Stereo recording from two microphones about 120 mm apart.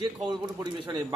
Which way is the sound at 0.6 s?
40° right (ahead or behind).